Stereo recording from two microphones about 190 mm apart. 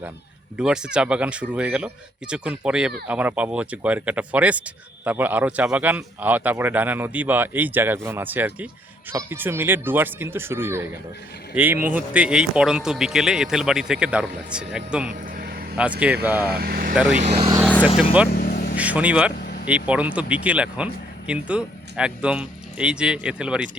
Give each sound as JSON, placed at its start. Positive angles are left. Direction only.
{"t": 0.5, "sound": "speech", "side_deg": -5}
{"t": 15.1, "sound": "vehicle", "side_deg": -50}
{"t": 15.8, "sound": "speech", "side_deg": -5}
{"t": 16.5, "sound": "speech", "side_deg": -55}
{"t": 16.9, "sound": "speech", "side_deg": -5}
{"t": 17.8, "sound": "speech", "side_deg": 30}
{"t": 18.3, "sound": "vehicle", "side_deg": 50}
{"t": 18.8, "sound": "speech", "side_deg": -5}